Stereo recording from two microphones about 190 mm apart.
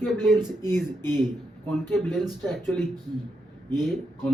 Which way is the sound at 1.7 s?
Centre (ahead or behind).